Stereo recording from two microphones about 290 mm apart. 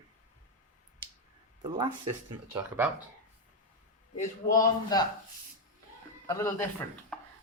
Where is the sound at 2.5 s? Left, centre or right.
Centre.